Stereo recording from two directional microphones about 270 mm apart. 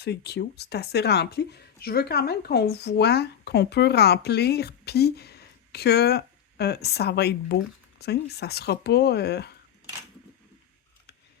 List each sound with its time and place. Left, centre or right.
0.0 s speech: left